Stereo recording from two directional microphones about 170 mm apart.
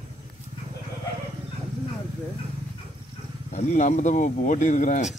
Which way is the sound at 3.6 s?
45° left (ahead or behind).